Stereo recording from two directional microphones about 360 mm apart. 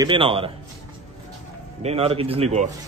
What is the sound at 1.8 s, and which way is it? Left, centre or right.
Speech, centre.